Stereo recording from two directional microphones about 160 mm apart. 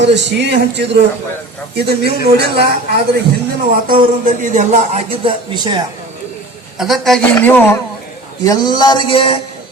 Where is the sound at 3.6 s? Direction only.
65° right (ahead or behind).